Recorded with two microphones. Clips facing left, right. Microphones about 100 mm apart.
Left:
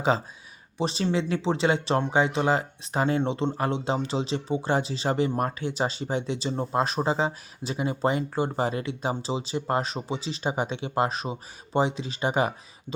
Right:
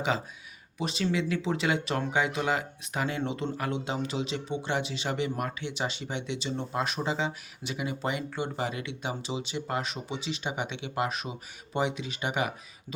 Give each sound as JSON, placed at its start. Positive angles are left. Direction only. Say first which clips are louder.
{"t": 0.8, "sound": "speech", "louder": "left 3 dB", "side_deg": 30}